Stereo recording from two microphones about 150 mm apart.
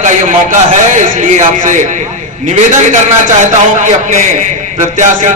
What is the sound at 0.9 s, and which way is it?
A man's voice, 60° right (ahead or behind).